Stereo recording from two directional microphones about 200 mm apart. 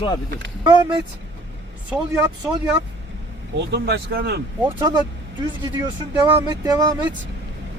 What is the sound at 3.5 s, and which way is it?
Speech, 60° right (ahead or behind).